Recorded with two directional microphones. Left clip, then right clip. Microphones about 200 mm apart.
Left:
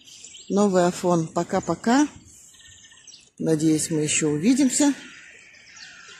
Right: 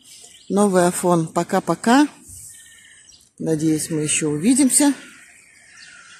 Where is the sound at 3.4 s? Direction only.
5° right (ahead or behind).